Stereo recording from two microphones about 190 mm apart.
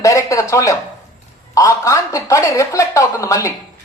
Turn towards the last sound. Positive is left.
turn(degrees=15)  # may be behind; listen again after turning